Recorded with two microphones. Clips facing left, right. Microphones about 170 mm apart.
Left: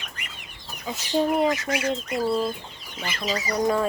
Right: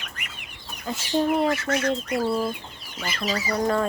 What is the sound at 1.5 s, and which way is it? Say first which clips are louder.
Speech: right 1 dB; 15° left (ahead or behind).